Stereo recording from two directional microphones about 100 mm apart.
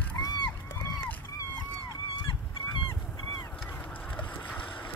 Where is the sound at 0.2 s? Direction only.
35° left (ahead or behind).